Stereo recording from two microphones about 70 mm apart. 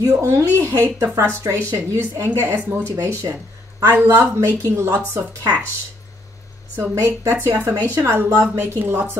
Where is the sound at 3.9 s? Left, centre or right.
Right.